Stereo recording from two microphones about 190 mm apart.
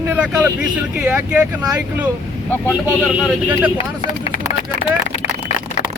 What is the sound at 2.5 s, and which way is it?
Speech, 10° left (ahead or behind).